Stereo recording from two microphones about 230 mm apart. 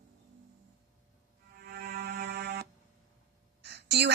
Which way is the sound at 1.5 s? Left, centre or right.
Right.